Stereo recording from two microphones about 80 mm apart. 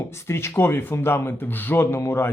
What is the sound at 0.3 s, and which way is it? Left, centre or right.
Speech, left.